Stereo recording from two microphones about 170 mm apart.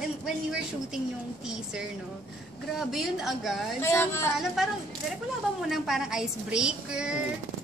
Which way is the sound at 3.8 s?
15° left (ahead or behind).